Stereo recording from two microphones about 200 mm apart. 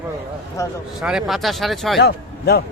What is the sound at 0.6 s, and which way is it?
Speech, 15° left (ahead or behind).